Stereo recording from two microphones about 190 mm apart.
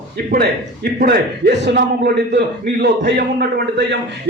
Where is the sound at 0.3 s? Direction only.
50° right (ahead or behind).